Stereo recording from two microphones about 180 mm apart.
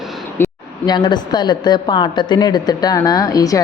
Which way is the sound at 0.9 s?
25° left (ahead or behind).